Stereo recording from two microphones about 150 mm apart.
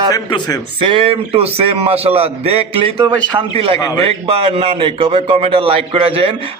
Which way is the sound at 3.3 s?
30° right (ahead or behind).